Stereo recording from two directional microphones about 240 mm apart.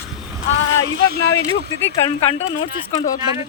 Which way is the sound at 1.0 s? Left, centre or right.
Right.